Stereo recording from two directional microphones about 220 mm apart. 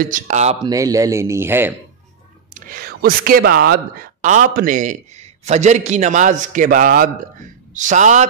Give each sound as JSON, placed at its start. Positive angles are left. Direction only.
{"t": 0.0, "sound": "speech", "side_deg": -35}
{"t": 0.7, "sound": "speech", "side_deg": -15}
{"t": 2.5, "sound": "speech", "side_deg": -40}